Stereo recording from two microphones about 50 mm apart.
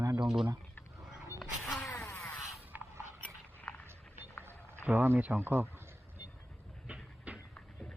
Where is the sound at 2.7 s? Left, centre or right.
Right.